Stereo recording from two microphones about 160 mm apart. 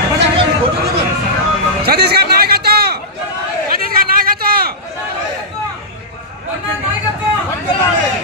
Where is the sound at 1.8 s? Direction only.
80° right.